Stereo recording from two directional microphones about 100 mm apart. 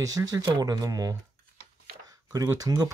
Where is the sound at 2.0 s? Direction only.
40° right (ahead or behind).